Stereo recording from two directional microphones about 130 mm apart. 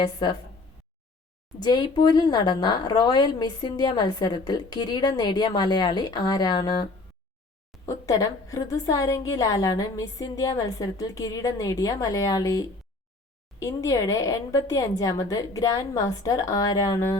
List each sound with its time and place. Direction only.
0.0 s speech: 35° left (ahead or behind)
1.5 s speech: 35° left (ahead or behind)
7.9 s a woman's voice: 25° left (ahead or behind)